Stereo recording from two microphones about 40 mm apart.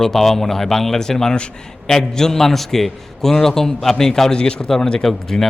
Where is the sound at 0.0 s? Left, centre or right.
Centre.